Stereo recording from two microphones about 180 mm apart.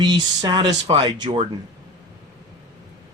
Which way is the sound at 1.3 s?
35° right (ahead or behind).